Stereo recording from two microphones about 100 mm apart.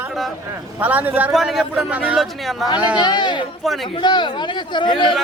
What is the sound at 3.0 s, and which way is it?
Speech, 50° left (ahead or behind).